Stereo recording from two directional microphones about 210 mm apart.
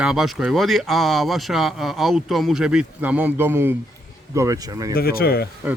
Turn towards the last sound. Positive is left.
turn(degrees=50)  # may be behind; listen again after turning